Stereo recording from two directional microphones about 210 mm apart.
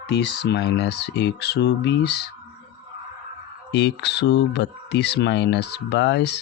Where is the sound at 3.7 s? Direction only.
55° left (ahead or behind).